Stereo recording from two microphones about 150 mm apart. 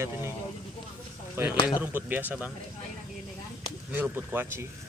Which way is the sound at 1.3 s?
15° right (ahead or behind).